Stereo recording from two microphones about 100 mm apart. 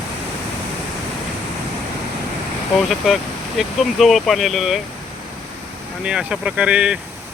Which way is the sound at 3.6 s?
Centre (ahead or behind).